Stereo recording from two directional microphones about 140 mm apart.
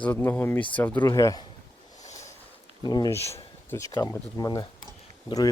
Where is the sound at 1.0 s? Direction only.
25° left (ahead or behind).